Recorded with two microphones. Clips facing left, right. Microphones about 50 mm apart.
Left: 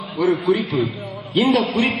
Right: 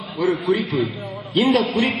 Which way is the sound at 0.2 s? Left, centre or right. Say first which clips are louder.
Left 2 dB; centre.